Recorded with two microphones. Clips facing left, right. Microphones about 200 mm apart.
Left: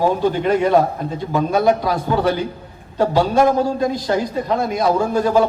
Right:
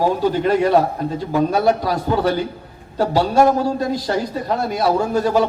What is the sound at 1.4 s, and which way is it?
Speech, 40° right (ahead or behind).